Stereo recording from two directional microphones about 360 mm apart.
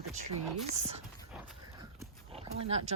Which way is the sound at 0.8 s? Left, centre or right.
Centre.